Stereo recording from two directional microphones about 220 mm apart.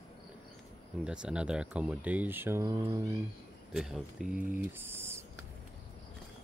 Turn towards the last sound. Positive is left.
turn(degrees=-10)  # may be behind; listen again after turning